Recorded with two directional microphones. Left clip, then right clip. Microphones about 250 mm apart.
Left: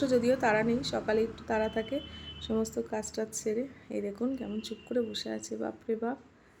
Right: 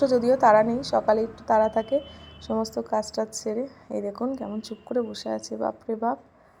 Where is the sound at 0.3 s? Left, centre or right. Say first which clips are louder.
Right 9 dB; centre.